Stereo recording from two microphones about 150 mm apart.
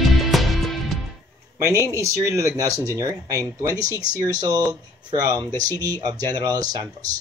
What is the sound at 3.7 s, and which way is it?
Speech, 15° left (ahead or behind).